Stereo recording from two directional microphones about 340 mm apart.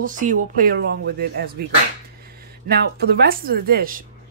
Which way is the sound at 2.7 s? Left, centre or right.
Right.